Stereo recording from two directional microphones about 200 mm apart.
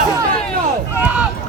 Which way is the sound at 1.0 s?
5° right (ahead or behind).